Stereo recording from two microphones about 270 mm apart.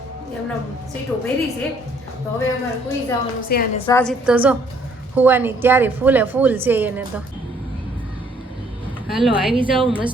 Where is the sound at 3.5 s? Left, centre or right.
Left.